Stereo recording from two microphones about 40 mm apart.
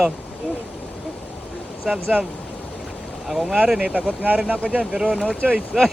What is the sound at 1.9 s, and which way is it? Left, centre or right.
Speech, right.